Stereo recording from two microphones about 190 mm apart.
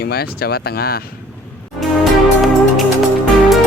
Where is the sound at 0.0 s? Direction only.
55° left (ahead or behind).